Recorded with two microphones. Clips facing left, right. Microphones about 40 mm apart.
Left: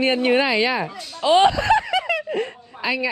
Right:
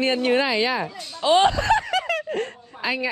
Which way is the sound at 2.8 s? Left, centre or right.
Left.